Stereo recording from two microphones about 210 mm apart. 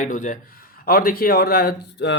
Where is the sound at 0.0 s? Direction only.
35° left (ahead or behind).